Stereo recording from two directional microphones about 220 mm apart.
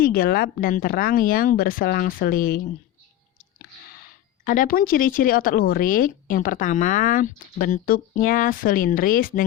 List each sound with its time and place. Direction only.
0.0 s speech: 40° left (ahead or behind)